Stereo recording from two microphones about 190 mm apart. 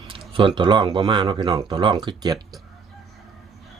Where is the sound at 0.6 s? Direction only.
25° right (ahead or behind).